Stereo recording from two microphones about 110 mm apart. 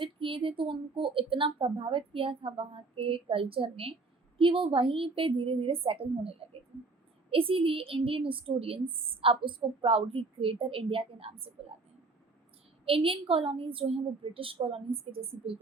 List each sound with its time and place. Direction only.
0.0 s speech: 55° right (ahead or behind)
12.8 s speech: 55° right (ahead or behind)